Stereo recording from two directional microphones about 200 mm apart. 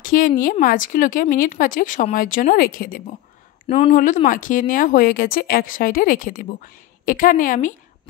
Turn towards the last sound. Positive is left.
turn(degrees=40)  # may be behind; listen again after turning